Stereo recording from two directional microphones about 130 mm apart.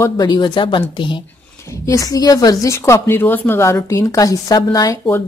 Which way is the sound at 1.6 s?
25° left (ahead or behind).